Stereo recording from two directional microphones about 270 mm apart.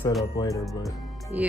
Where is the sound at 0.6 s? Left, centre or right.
Centre.